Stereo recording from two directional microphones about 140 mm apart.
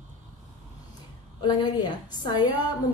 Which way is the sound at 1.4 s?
30° left (ahead or behind).